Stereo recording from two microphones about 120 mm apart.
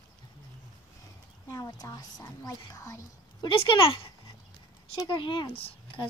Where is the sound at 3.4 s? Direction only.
45° left (ahead or behind).